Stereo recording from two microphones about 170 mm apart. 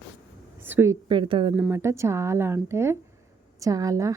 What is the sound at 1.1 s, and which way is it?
Speech, 30° right (ahead or behind).